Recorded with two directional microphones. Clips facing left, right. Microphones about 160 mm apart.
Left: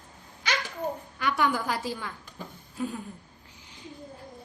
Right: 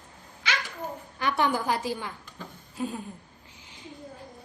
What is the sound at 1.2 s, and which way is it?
Speech, 30° right (ahead or behind).